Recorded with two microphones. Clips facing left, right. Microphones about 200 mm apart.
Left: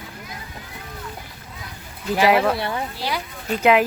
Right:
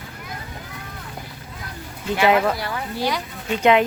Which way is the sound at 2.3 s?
Centre (ahead or behind).